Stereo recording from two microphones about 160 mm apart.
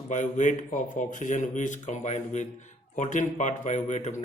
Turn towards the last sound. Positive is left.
turn(degrees=45)  # may be behind; listen again after turning